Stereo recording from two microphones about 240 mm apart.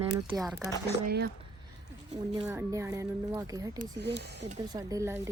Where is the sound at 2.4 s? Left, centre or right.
Centre.